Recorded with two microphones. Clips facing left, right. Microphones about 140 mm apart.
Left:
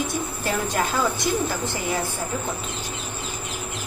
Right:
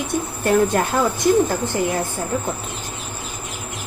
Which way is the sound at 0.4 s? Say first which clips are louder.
Right 9 dB; 55° right (ahead or behind).